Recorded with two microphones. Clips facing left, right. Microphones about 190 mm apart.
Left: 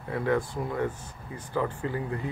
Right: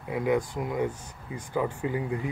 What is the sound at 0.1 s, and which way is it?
Speech, 15° right (ahead or behind).